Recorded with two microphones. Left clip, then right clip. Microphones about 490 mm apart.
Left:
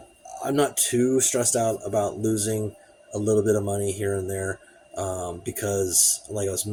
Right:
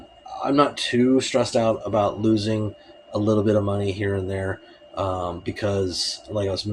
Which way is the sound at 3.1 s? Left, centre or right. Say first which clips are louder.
Right 1 dB; left.